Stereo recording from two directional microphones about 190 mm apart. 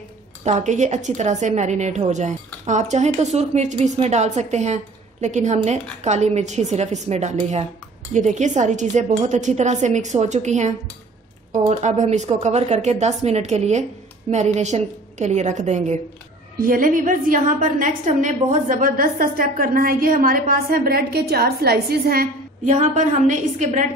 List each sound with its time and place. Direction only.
0.4 s a woman's voice: 35° right (ahead or behind)